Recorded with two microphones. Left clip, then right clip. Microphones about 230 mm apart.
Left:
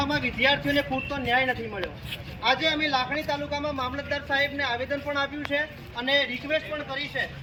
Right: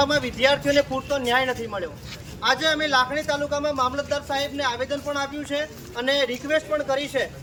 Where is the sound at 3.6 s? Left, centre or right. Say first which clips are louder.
Right 6 dB; centre.